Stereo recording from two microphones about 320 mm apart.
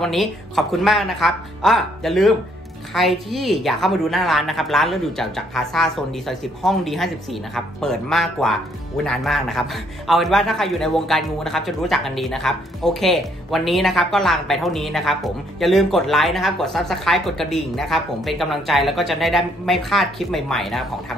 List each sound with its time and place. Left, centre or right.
0.0 s a man's voice: centre